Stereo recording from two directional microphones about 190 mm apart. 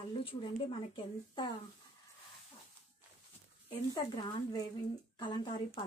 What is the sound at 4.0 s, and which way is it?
Speech, 20° left (ahead or behind).